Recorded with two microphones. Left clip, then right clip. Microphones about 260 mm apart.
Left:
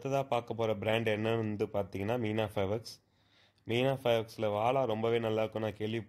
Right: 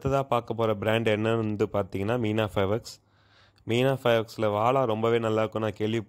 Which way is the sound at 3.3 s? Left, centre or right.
Right.